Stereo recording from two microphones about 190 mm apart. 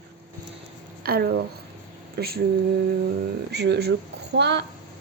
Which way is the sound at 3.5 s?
60° right (ahead or behind).